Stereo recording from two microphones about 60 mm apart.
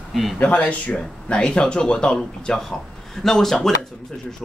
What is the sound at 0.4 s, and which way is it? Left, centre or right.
Speech, left.